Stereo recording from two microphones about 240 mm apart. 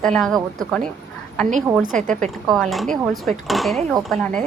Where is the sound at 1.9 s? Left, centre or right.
Right.